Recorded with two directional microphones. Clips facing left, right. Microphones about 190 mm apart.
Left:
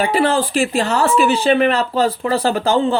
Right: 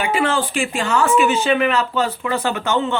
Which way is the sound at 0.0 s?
35° left (ahead or behind).